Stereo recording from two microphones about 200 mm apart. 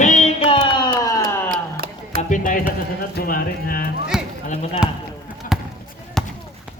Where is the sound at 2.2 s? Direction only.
40° left (ahead or behind).